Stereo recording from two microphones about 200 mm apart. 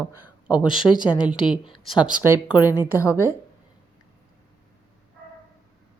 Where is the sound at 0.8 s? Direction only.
25° left (ahead or behind).